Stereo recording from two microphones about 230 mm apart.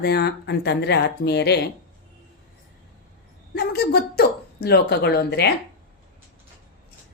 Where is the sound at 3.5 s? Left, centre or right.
Left.